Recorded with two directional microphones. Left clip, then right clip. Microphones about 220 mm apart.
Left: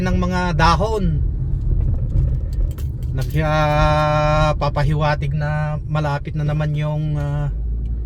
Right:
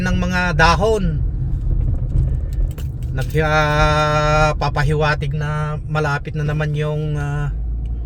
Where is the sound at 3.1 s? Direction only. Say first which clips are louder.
Right 3 dB; 30° right (ahead or behind).